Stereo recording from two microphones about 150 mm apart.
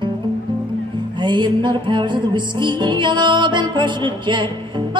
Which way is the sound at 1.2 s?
30° right (ahead or behind).